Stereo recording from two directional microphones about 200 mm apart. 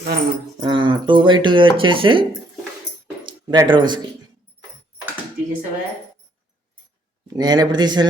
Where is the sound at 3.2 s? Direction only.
25° right (ahead or behind).